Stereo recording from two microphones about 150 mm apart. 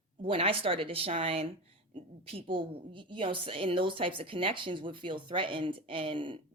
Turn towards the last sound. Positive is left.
turn(degrees=-35)  # may be behind; listen again after turning